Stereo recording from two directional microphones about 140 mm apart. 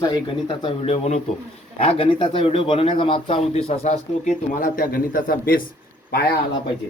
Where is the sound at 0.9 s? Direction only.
50° left (ahead or behind); by 6.4 s 90° left.